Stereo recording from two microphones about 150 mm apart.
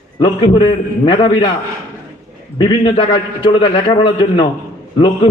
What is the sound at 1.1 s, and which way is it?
Speech, 30° left (ahead or behind).